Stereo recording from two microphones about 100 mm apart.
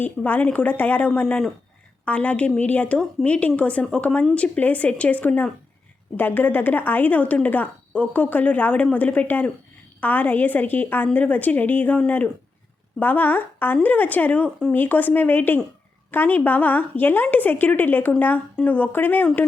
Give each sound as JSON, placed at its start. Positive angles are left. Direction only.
{"t": 0.0, "sound": "a woman's voice", "side_deg": 15}